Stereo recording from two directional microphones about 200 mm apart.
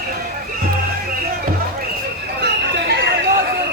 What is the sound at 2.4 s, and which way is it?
Chatter, 55° right (ahead or behind).